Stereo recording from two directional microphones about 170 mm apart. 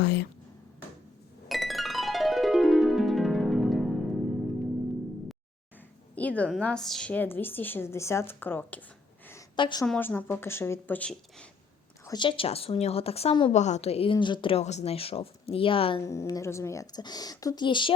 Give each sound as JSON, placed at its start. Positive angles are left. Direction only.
{"t": 0.0, "sound": "a sound", "side_deg": 80}
{"t": 1.5, "sound": "music", "side_deg": 0}
{"t": 6.1, "sound": "a woman's voice", "side_deg": 10}
{"t": 9.6, "sound": "a woman's voice", "side_deg": 30}
{"t": 9.8, "sound": "a woman's voice", "side_deg": 10}
{"t": 12.0, "sound": "a woman's voice", "side_deg": 25}
{"t": 13.5, "sound": "a woman's voice", "side_deg": 40}
{"t": 16.0, "sound": "a woman's voice", "side_deg": 15}